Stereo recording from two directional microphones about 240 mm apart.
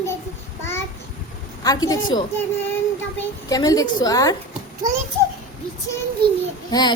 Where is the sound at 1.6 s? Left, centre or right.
Centre.